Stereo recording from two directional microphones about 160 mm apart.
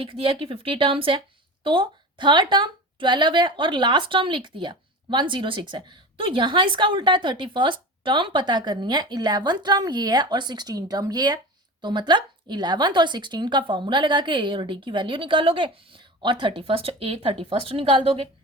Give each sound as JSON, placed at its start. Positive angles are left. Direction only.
{"t": 0.0, "sound": "a woman's voice", "side_deg": -35}